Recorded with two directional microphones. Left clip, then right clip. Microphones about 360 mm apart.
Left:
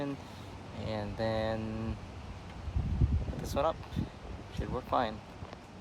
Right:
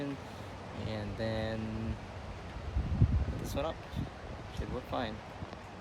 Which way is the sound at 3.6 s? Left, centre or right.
Centre.